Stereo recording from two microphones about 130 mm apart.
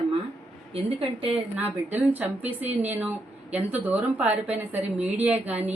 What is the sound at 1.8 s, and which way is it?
Speech, 15° right (ahead or behind).